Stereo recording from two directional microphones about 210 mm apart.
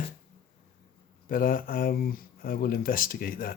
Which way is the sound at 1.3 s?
40° left (ahead or behind).